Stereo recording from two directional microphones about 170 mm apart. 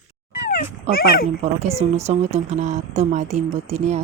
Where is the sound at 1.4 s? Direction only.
40° right (ahead or behind).